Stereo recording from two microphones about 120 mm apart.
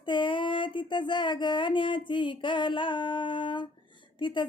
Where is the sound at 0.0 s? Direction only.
40° left (ahead or behind).